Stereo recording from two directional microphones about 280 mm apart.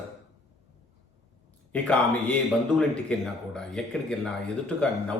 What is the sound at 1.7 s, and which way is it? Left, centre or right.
A man's voice, centre.